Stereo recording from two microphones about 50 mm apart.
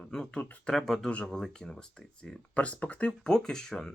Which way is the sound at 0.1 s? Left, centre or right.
Centre.